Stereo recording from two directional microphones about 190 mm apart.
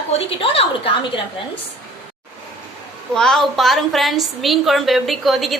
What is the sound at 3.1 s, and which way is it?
A woman's voice, centre (ahead or behind).